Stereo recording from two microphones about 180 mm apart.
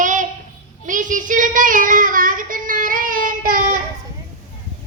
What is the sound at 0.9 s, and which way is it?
Child singing, 45° right (ahead or behind).